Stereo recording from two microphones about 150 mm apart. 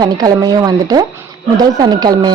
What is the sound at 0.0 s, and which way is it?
Speech, 25° right (ahead or behind).